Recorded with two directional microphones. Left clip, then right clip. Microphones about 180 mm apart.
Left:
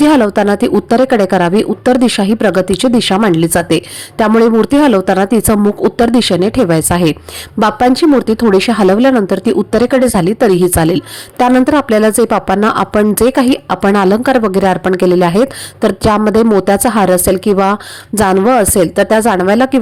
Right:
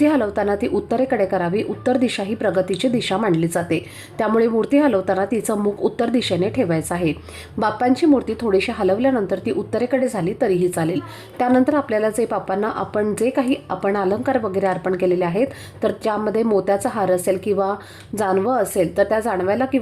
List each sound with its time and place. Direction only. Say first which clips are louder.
0.0 s speech: left 9 dB; 40° left (ahead or behind)